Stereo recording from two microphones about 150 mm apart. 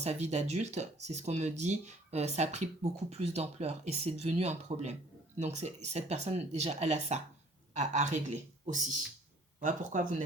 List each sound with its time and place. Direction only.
0.0 s speech: 45° right (ahead or behind)